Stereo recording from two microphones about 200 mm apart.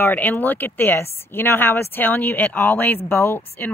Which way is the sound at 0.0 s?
10° left (ahead or behind).